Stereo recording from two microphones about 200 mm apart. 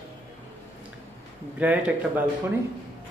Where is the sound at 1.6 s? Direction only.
5° right (ahead or behind).